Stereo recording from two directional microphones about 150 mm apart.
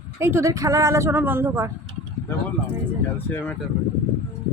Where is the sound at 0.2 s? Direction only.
15° right (ahead or behind).